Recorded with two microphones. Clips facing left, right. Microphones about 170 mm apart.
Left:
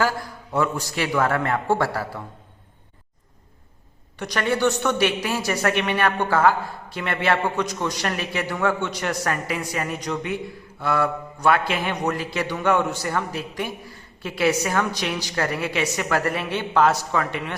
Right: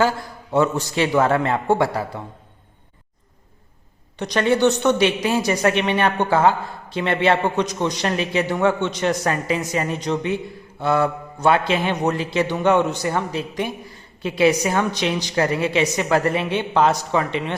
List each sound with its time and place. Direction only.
0.5 s a woman's voice: 25° right (ahead or behind)
4.2 s a woman's voice: 20° right (ahead or behind)